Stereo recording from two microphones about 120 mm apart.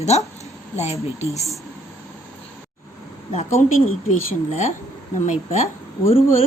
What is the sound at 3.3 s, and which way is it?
Speech, 70° left (ahead or behind).